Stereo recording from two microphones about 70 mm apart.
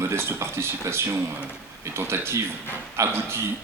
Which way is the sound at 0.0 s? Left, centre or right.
Right.